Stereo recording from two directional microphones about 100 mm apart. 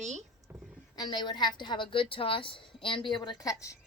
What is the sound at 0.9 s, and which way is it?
A woman's voice, 45° left (ahead or behind).